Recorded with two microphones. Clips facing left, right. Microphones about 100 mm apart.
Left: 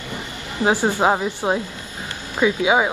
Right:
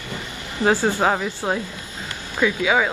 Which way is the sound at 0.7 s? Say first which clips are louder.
Left 1 dB; 15° left (ahead or behind).